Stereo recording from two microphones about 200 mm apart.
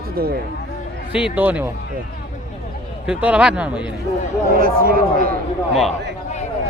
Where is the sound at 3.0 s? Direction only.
5° right (ahead or behind).